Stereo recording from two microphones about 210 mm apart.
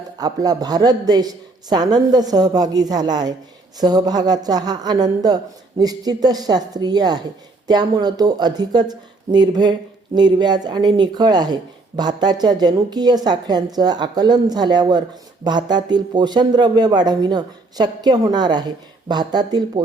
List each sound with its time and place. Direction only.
0.2 s speech: 20° right (ahead or behind)